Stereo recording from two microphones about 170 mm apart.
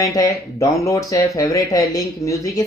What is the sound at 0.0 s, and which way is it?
Speech, 20° left (ahead or behind).